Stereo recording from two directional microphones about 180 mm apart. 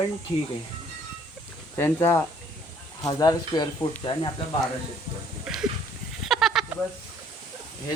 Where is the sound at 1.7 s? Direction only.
10° left (ahead or behind).